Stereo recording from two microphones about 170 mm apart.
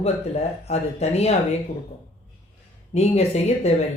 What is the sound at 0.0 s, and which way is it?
Speech, 40° left (ahead or behind).